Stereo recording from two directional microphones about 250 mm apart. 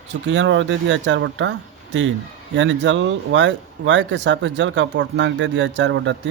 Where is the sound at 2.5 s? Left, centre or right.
Right.